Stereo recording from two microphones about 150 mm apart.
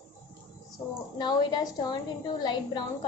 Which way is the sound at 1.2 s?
30° left (ahead or behind).